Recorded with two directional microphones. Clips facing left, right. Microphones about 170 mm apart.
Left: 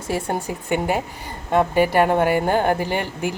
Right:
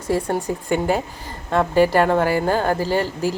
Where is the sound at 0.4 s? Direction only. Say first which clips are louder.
Right 2 dB; 5° left (ahead or behind).